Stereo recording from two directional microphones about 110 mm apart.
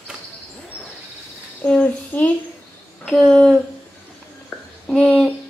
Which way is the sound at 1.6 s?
10° left (ahead or behind).